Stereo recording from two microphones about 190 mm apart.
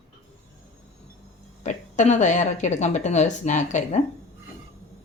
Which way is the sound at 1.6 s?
40° left (ahead or behind).